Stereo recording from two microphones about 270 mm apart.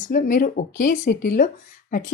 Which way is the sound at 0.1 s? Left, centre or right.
Left.